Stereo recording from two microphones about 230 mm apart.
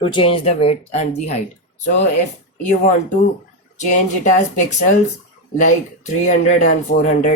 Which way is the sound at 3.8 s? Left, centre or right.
Left.